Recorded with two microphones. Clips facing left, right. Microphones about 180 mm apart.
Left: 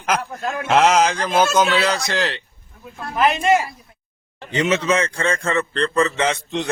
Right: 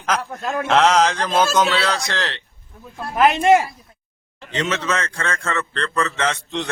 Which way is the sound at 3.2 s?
55° right (ahead or behind).